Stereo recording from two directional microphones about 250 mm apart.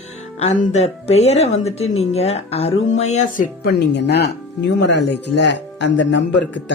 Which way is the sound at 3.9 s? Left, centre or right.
Left.